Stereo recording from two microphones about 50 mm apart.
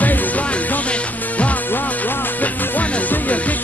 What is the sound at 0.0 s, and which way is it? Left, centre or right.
Music, left.